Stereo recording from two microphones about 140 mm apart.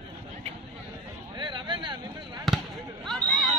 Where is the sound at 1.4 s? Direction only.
35° right (ahead or behind).